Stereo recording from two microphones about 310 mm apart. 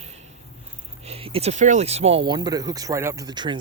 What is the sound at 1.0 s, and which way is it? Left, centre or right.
Speech, centre.